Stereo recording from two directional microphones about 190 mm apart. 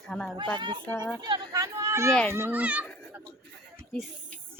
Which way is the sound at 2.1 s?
5° left (ahead or behind).